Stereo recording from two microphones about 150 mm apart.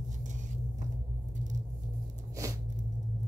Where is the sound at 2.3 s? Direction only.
20° right (ahead or behind).